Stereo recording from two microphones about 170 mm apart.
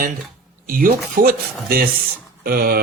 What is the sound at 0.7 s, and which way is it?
Speech, 55° right (ahead or behind).